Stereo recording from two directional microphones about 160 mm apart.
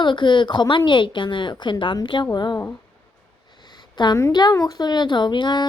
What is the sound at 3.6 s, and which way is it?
A woman's voice, 25° left (ahead or behind).